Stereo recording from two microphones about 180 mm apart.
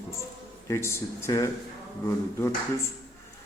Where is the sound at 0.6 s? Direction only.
15° left (ahead or behind).